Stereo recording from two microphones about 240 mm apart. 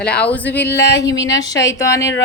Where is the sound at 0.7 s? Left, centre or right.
Left.